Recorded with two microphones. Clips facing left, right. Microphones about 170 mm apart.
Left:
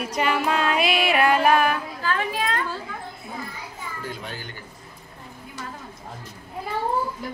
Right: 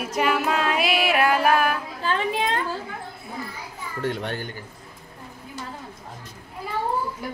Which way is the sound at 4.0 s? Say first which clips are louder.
Right 10 dB; 70° right (ahead or behind).